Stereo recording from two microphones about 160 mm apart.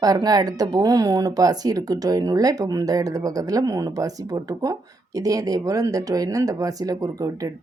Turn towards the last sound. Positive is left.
turn(degrees=-20)  # may be behind; listen again after turning